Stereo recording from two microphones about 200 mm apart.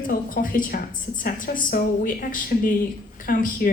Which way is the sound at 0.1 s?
45° left (ahead or behind).